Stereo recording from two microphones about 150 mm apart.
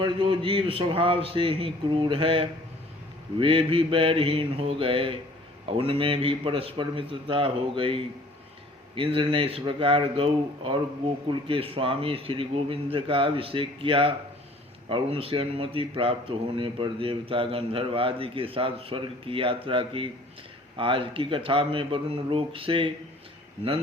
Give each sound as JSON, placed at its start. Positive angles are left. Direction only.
{"t": 0.0, "sound": "speech", "side_deg": -35}